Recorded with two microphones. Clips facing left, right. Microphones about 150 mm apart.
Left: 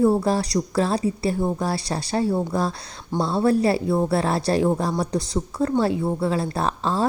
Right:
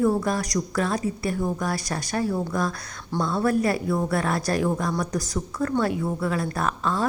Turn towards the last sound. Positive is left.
turn(degrees=30)  # may be behind; listen again after turning